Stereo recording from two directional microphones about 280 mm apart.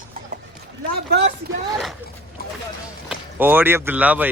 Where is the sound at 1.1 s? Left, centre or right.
Right.